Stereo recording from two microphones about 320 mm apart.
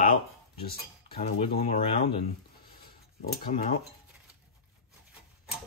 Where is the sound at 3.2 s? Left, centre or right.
Left.